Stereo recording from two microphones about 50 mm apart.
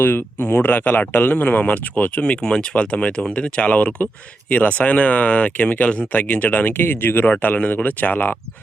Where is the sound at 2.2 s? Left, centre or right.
Centre; by 7.2 s left.